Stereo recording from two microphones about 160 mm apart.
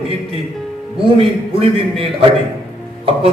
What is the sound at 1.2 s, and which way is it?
Speech, 35° right (ahead or behind).